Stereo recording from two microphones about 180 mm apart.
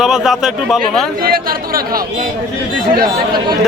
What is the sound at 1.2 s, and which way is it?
Speech, 55° right (ahead or behind).